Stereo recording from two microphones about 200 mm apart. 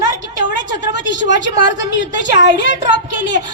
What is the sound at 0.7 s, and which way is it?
A woman's voice, 60° left (ahead or behind).